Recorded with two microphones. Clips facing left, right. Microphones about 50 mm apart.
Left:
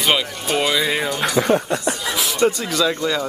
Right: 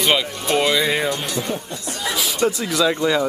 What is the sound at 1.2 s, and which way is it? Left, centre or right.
Speech, left.